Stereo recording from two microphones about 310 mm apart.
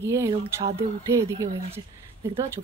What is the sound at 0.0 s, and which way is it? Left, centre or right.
Speech, centre.